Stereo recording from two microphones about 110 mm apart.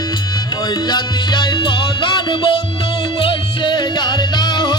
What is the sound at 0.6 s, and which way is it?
Music, 40° left (ahead or behind).